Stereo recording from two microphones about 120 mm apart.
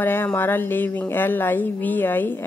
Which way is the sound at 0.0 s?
15° left (ahead or behind).